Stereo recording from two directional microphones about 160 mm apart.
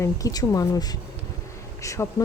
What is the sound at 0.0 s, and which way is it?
Speech, 20° left (ahead or behind).